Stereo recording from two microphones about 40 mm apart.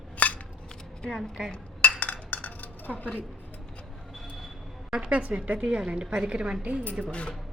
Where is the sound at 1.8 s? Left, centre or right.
Left.